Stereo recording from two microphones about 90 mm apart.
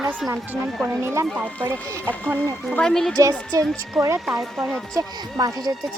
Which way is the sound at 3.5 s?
45° right (ahead or behind).